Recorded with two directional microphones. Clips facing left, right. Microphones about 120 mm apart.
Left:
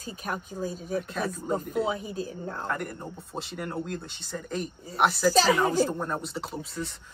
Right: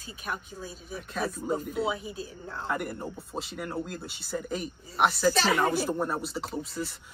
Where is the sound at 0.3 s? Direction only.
45° left (ahead or behind).